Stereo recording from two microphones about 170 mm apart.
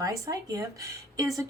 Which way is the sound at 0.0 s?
20° right (ahead or behind).